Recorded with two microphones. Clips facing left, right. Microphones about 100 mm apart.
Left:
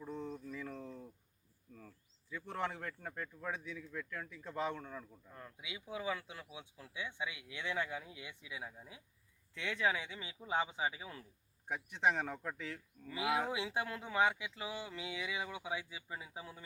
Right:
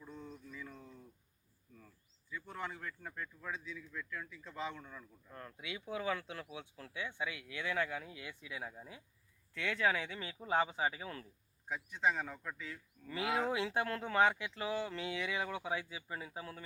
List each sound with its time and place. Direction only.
0.0 s a sound: 30° left (ahead or behind)
0.5 s a sound: 60° left (ahead or behind)
2.3 s speech: 70° left (ahead or behind)
3.1 s speech: 40° left (ahead or behind)
3.5 s a man's voice: 60° left (ahead or behind)
5.3 s speech: 10° left (ahead or behind)
11.7 s speech: 65° left (ahead or behind)
12.5 s speech: 65° left (ahead or behind)
13.1 s speech: 15° left (ahead or behind)